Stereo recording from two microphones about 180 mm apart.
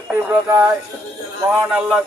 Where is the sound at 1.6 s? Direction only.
5° right (ahead or behind).